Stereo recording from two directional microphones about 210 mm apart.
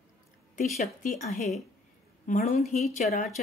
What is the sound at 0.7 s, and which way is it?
Speech, 35° left (ahead or behind).